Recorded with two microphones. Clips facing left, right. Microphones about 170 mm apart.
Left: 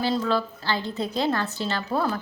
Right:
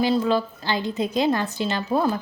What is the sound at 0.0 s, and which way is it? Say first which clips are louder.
A woman's voice: right 4 dB; 15° right (ahead or behind).